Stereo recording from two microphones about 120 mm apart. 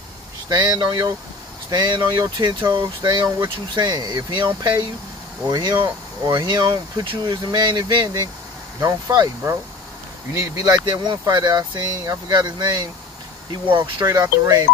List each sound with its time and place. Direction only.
0.5 s speech: 30° right (ahead or behind)
10.3 s speech: 25° right (ahead or behind)
13.9 s speech: 25° right (ahead or behind)